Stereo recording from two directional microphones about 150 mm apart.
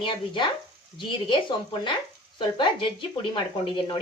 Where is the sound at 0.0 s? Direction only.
30° left (ahead or behind).